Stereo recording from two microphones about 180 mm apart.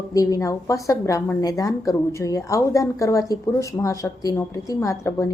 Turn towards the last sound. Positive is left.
turn(degrees=15)  # may be behind; listen again after turning